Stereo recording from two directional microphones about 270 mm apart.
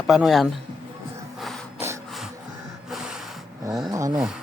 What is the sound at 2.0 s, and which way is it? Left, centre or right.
Music, centre.